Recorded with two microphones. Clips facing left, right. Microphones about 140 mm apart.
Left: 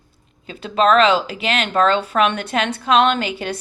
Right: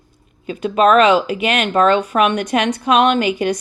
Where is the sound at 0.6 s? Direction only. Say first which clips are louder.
Right 3 dB; 15° right (ahead or behind).